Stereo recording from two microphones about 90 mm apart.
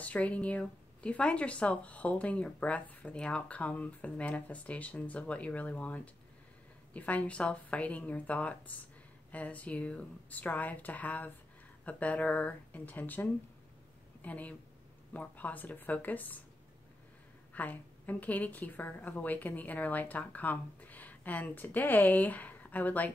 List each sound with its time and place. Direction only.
0.0 s speech: 15° left (ahead or behind)
17.6 s speech: 20° left (ahead or behind)